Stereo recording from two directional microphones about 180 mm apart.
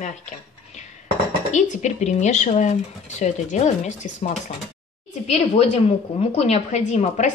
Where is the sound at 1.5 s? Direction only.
40° left (ahead or behind).